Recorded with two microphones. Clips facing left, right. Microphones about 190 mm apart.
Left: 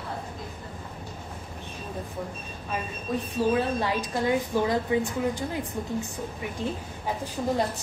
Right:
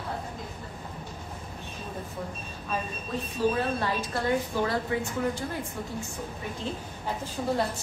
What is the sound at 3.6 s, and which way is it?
Speech, 15° left (ahead or behind).